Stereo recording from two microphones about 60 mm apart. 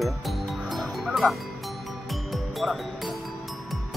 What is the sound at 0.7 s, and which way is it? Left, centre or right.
Music, centre.